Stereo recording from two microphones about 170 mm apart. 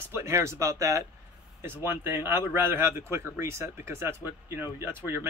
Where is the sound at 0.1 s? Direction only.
15° right (ahead or behind).